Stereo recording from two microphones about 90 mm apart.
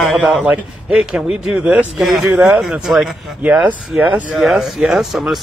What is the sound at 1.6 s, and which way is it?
Speech, 15° right (ahead or behind).